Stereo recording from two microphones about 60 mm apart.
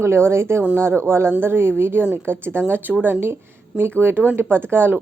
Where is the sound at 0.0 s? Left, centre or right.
Right.